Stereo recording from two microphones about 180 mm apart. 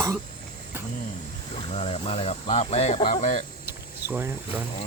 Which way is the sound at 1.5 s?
35° left (ahead or behind).